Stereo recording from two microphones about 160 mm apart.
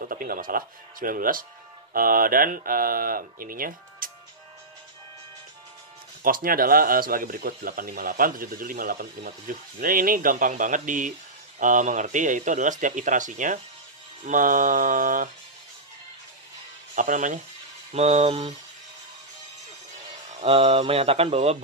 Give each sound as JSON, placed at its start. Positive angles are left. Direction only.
{"t": 0.0, "sound": "speech", "side_deg": -60}
{"t": 6.2, "sound": "speech", "side_deg": -60}
{"t": 16.9, "sound": "speech", "side_deg": -55}
{"t": 17.9, "sound": "mantra", "side_deg": -45}
{"t": 20.3, "sound": "mantra", "side_deg": -40}